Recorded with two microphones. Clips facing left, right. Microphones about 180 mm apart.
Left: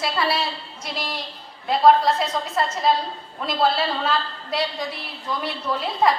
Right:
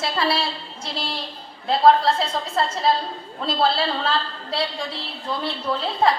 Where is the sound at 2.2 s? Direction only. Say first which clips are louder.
Even; 30° right (ahead or behind).